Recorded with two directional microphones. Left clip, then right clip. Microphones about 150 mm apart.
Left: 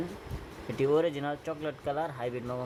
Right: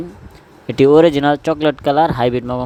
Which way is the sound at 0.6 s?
65° right (ahead or behind).